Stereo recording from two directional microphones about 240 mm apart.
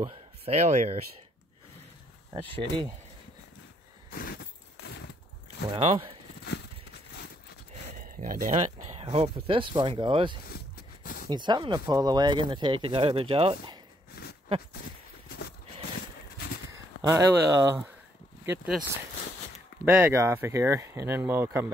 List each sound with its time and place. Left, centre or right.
0.0 s speech: right
4.1 s keys jangling: left
5.7 s speech: right
7.7 s a sound: right
8.8 s speech: right
10.5 s a sound: left
11.2 s speech: centre
15.2 s horse: left
17.0 s speech: centre